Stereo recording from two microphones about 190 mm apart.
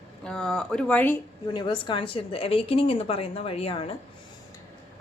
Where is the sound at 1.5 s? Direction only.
25° left (ahead or behind).